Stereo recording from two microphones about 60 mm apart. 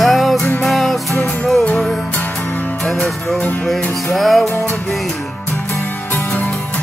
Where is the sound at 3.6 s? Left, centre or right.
Centre.